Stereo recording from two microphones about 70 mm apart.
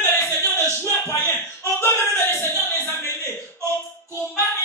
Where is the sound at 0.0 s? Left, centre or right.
Left.